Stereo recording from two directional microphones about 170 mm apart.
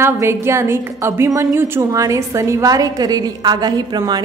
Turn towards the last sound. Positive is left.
turn(degrees=-25)  # may be behind; listen again after turning